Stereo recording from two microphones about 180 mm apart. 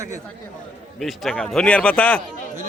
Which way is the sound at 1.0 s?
Centre (ahead or behind).